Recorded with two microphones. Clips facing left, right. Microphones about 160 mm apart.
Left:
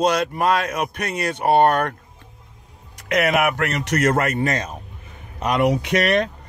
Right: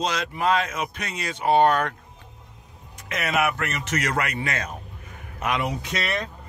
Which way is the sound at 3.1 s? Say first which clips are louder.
Left 6 dB; 65° left (ahead or behind).